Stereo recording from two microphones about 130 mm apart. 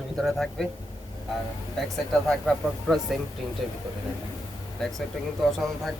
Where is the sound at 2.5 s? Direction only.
5° left (ahead or behind).